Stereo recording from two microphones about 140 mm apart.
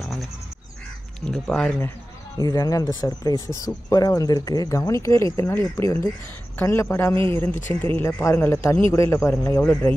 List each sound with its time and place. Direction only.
0.0 s goose: centre (ahead or behind)
1.2 s speech: 5° left (ahead or behind)
2.3 s speech: 25° left (ahead or behind)